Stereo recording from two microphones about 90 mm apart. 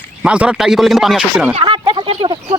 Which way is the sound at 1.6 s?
70° right (ahead or behind).